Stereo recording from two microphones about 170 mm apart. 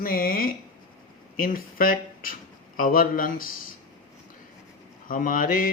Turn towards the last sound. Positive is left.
turn(degrees=55)  # may be behind; listen again after turning